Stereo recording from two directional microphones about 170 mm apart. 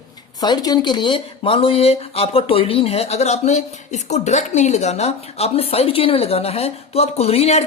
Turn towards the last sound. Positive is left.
turn(degrees=35)  # may be behind; listen again after turning